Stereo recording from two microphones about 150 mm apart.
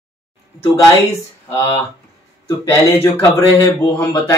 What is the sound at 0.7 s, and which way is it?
Speech, 20° left (ahead or behind).